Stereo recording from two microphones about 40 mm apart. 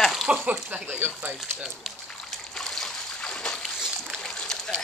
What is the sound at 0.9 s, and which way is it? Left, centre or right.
Speech, right.